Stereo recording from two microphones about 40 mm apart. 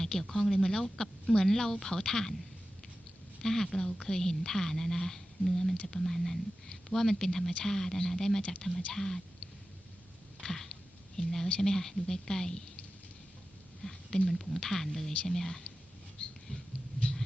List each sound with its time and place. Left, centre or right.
0.0 s speech: centre
3.4 s speech: centre
8.4 s speech: left
8.9 s speech: centre
10.4 s a sound: centre
11.2 s speech: centre
13.8 s speech: centre